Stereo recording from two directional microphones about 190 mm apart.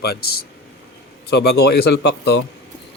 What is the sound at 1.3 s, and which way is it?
A man's voice, 60° left (ahead or behind).